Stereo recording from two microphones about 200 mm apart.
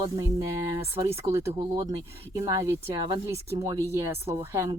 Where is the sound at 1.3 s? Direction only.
20° right (ahead or behind).